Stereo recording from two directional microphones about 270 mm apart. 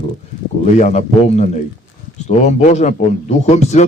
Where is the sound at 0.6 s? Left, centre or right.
Left.